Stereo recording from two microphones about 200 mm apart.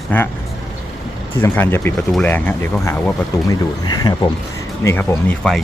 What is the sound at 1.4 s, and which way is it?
Speech, 10° left (ahead or behind).